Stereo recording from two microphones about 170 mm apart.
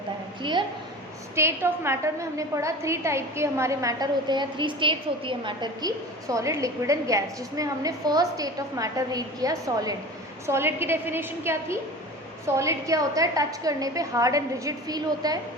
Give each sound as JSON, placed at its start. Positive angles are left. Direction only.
{"t": 1.4, "sound": "a woman's voice", "side_deg": -15}